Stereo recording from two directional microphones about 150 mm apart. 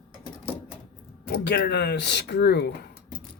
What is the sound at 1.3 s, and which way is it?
Speech, 90° left.